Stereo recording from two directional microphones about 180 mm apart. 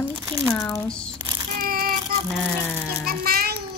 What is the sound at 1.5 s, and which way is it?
Child singing, 55° right (ahead or behind).